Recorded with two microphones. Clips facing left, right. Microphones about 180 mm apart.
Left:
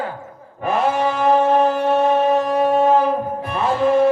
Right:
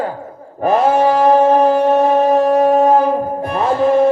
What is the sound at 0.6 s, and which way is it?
Music, 40° right (ahead or behind).